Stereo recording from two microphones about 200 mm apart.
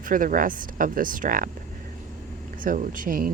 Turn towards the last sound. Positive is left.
turn(degrees=-45)  # may be behind; listen again after turning